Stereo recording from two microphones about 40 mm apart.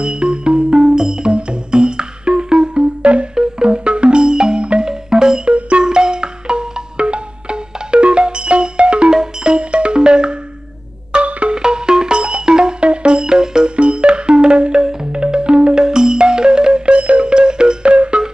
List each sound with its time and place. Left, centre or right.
0.0 s music: right
3.3 s music: centre
11.5 s music: centre
13.7 s music: right